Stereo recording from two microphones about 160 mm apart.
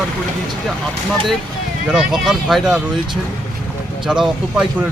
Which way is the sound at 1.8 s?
5° right (ahead or behind).